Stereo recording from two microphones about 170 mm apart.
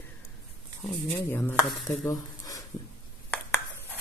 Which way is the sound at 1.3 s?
10° left (ahead or behind).